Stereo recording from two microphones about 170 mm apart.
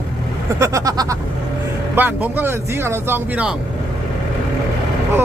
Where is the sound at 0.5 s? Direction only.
20° right (ahead or behind).